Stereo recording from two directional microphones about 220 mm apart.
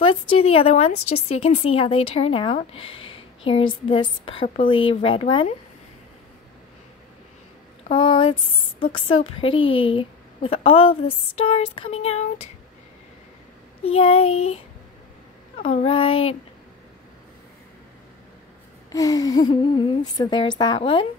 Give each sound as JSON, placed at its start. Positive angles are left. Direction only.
{"t": 0.0, "sound": "a woman's voice", "side_deg": 25}
{"t": 7.9, "sound": "a woman's voice", "side_deg": 20}
{"t": 13.9, "sound": "a woman's voice", "side_deg": 25}
{"t": 15.5, "sound": "a woman's voice", "side_deg": 30}
{"t": 18.9, "sound": "a woman's voice", "side_deg": 15}